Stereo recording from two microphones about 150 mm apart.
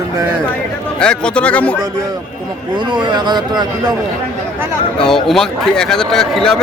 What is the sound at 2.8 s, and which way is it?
A man's voice, 30° right (ahead or behind).